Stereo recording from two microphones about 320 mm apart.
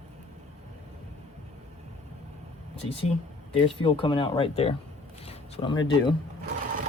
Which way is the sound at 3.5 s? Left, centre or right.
Centre.